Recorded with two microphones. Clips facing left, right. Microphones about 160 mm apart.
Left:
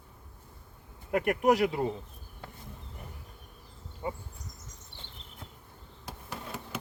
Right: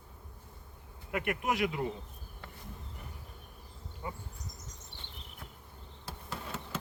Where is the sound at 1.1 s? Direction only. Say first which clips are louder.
Left 8 dB; 40° left (ahead or behind).